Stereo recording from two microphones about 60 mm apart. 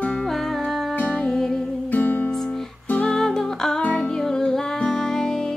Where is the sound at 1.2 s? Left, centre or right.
Centre.